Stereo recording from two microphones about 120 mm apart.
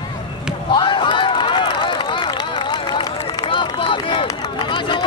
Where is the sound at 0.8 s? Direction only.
40° left (ahead or behind).